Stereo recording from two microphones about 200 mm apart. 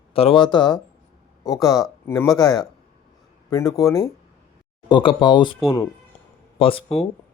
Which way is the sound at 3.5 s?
15° left (ahead or behind).